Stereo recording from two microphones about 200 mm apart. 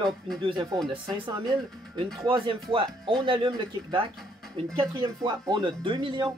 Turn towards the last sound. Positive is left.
turn(degrees=-25)  # may be behind; listen again after turning